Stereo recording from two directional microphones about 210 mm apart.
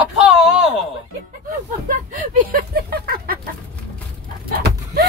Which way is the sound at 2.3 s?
45° right (ahead or behind).